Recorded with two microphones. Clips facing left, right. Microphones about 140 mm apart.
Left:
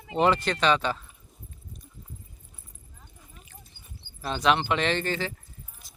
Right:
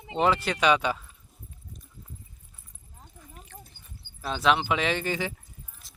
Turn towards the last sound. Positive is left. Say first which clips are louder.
# left 1 dB
turn(degrees=-10)  # may be behind; listen again after turning